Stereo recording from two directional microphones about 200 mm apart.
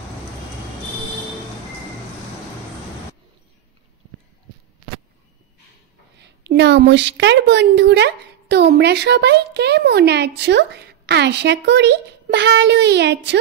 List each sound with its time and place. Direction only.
6.1 s a woman's voice: 60° right (ahead or behind)